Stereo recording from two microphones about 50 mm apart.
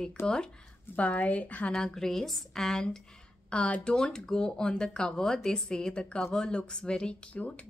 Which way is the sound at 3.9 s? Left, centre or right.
Centre.